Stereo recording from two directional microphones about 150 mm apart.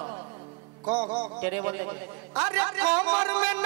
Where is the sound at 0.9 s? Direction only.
35° right (ahead or behind).